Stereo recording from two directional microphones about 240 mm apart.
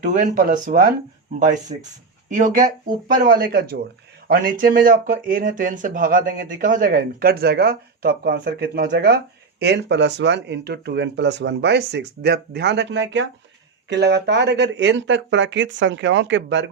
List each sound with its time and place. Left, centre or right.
0.0 s speech: right